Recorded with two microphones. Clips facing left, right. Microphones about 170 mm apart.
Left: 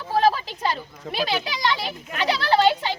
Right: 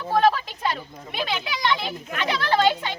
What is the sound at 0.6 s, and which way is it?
Speech, 30° left (ahead or behind).